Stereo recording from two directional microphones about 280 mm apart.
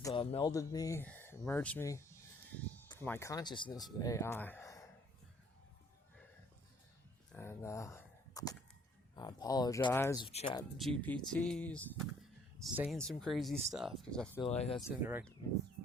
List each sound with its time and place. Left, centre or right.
0.0 s speech: centre
7.3 s a sound: centre
9.1 s speech: centre
11.0 s speech: centre
14.4 s speech: left
14.8 s speech: centre